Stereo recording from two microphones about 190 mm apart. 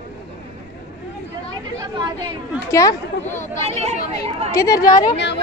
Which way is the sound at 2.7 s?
15° left (ahead or behind).